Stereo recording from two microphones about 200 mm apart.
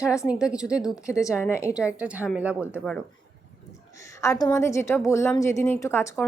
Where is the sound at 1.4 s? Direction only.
15° left (ahead or behind).